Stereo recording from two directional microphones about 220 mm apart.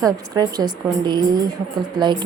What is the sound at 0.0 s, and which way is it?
A woman's voice, 15° right (ahead or behind).